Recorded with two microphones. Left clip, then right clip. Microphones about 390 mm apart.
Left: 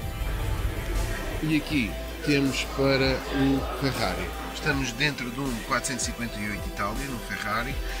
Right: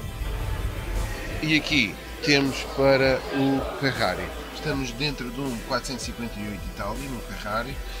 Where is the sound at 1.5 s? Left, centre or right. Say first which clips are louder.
Right 6 dB; centre.